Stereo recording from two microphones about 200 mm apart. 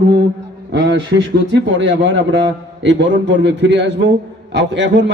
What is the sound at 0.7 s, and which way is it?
A man's voice, 60° right (ahead or behind).